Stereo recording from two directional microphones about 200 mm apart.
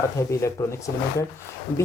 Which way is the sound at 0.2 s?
15° left (ahead or behind).